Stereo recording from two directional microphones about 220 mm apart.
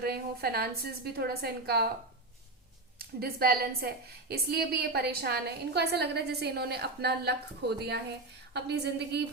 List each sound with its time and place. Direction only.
0.0 s a woman's voice: 45° right (ahead or behind)
3.2 s a woman's voice: 45° right (ahead or behind)